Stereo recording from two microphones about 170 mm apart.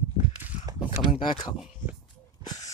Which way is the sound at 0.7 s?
30° left (ahead or behind).